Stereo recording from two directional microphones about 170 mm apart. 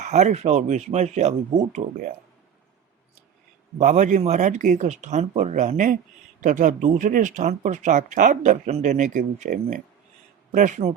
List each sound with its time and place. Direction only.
0.0 s speech: 40° right (ahead or behind)
3.8 s speech: 45° right (ahead or behind)